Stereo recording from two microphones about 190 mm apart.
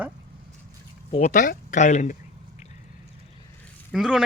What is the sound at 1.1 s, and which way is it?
Speech, 40° left (ahead or behind).